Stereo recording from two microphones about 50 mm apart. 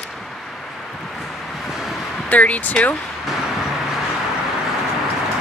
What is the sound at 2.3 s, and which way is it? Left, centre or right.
Speech, left.